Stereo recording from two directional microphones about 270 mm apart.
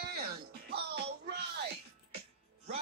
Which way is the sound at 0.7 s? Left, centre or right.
Right.